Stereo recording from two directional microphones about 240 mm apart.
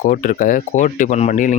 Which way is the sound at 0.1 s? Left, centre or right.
Left.